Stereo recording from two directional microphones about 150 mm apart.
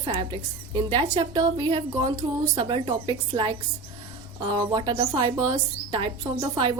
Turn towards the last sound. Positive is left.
turn(degrees=-30)  # may be behind; listen again after turning